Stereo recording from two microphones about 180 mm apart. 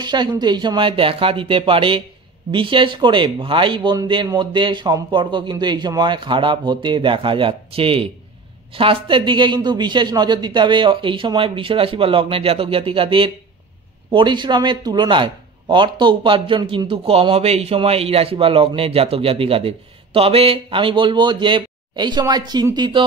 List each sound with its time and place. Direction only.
0.0 s a man's voice: 25° right (ahead or behind)